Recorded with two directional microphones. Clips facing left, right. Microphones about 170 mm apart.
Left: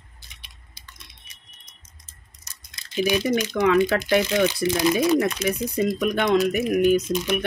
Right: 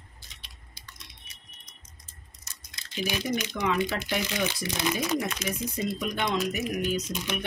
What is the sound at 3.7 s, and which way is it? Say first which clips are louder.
Speech: left 10 dB; 55° left (ahead or behind).